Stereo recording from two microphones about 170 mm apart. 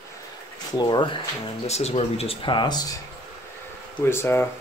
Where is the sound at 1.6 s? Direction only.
40° left (ahead or behind).